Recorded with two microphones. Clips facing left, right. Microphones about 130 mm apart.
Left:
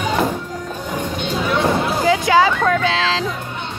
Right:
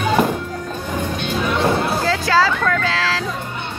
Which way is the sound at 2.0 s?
20° left (ahead or behind).